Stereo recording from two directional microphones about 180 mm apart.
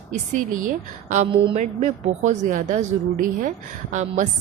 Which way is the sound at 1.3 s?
25° right (ahead or behind).